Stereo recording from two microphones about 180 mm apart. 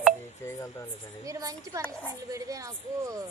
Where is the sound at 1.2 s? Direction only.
20° right (ahead or behind).